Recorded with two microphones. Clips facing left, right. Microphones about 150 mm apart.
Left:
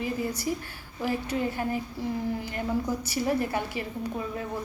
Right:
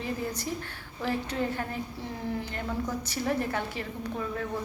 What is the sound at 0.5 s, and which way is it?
A woman's voice, 10° left (ahead or behind).